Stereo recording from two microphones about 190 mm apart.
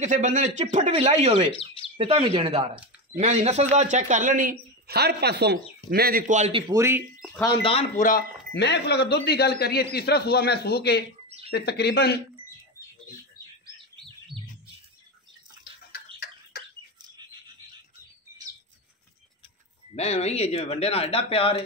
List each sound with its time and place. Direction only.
0.0 s speech: 40° right (ahead or behind)
6.7 s speech: 15° right (ahead or behind)
8.5 s a man's voice: 65° left (ahead or behind)
11.2 s bird: 35° right (ahead or behind)
11.5 s a man's voice: 60° left (ahead or behind)
14.3 s bird: centre (ahead or behind)
20.0 s speech: 35° left (ahead or behind)